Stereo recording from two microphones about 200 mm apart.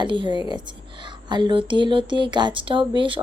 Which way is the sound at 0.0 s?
25° right (ahead or behind).